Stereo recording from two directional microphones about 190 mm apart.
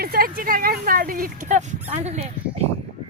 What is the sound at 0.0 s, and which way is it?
Speech, 50° right (ahead or behind).